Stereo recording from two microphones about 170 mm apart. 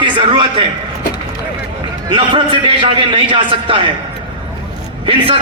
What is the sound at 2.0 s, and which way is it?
A man's voice, 30° right (ahead or behind).